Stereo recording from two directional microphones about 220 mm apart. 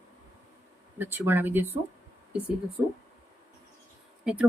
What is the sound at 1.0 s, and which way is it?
Speech, 10° right (ahead or behind).